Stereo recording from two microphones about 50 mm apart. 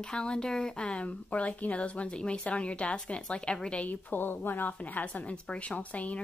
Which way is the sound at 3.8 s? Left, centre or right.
Left.